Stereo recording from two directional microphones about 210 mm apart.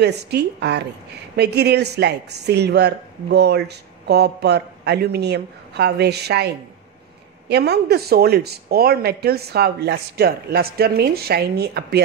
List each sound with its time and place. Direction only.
0.0 s speech: 50° right (ahead or behind)